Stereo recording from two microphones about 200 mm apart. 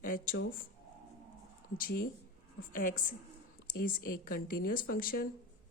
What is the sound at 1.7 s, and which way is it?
Speech, 45° left (ahead or behind).